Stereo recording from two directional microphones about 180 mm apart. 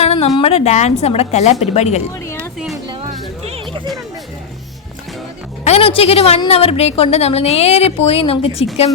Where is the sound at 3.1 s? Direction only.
35° right (ahead or behind).